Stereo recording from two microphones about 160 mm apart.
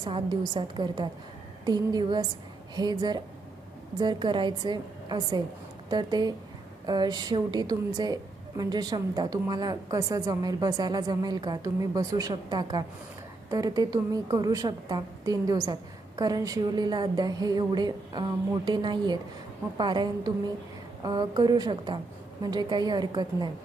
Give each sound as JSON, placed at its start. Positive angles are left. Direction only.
{"t": 0.0, "sound": "a woman's voice", "side_deg": -25}